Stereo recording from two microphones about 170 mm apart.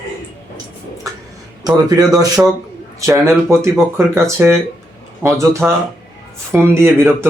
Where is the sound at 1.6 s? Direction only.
20° right (ahead or behind).